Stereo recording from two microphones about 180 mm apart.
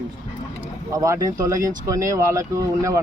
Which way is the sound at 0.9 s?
20° right (ahead or behind).